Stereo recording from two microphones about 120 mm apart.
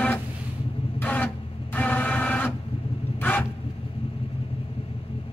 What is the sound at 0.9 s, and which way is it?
Printer, 15° left (ahead or behind).